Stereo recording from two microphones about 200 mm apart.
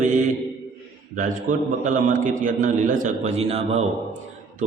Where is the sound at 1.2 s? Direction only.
40° right (ahead or behind).